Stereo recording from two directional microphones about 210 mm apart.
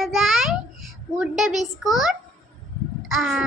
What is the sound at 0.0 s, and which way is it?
Babbling, centre (ahead or behind).